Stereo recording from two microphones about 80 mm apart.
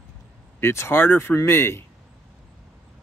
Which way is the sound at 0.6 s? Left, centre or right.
Left.